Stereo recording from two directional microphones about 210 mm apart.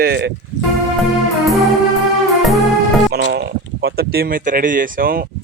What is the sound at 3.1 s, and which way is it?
Speech, 50° right (ahead or behind).